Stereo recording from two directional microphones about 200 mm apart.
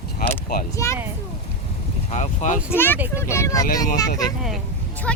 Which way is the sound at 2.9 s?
10° right (ahead or behind).